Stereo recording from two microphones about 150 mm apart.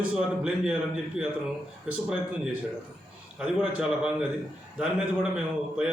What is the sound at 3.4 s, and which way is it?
Speech, 5° right (ahead or behind).